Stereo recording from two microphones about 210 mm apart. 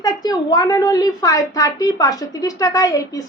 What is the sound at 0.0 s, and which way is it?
A woman's voice, 20° left (ahead or behind).